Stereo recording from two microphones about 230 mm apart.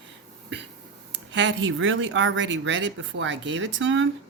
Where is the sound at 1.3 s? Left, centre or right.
Right.